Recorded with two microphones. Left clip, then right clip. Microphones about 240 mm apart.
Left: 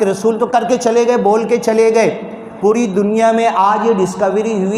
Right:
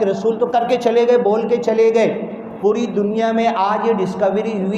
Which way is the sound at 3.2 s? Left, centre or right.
Left.